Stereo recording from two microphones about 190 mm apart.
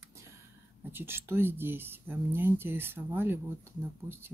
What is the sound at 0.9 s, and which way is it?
Speech, 10° right (ahead or behind).